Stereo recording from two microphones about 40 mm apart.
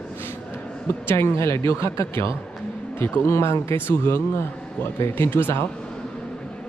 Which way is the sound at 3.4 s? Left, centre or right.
Left.